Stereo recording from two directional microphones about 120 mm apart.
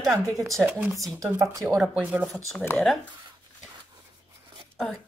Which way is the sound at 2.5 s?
10° left (ahead or behind).